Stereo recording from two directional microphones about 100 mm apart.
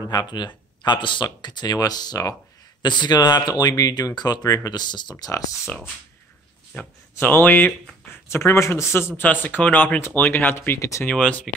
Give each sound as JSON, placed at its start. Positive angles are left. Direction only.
{"t": 0.0, "sound": "speech", "side_deg": 40}
{"t": 7.2, "sound": "a man's voice", "side_deg": 20}
{"t": 11.2, "sound": "speech", "side_deg": 10}